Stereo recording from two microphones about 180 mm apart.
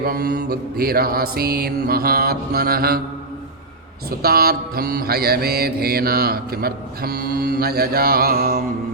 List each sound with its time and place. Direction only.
0.0 s mantra: 60° right (ahead or behind)
4.2 s mantra: 60° right (ahead or behind)